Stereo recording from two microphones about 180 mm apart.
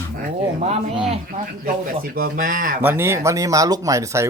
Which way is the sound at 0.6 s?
35° right (ahead or behind).